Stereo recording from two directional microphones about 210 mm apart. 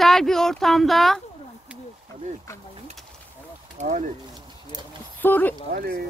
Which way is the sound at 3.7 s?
35° right (ahead or behind).